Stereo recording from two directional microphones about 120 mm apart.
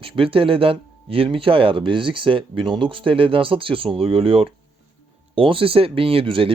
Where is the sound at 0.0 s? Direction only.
50° right (ahead or behind).